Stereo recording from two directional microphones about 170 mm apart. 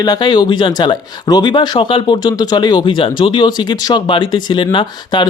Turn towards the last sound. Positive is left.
turn(degrees=30)  # may be behind; listen again after turning